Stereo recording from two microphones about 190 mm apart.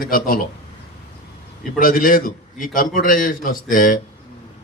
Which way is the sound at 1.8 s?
45° left (ahead or behind).